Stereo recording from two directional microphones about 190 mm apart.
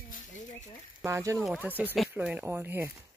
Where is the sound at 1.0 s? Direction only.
15° right (ahead or behind).